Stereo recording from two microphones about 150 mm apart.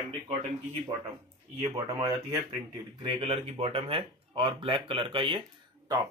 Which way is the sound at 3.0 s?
35° right (ahead or behind).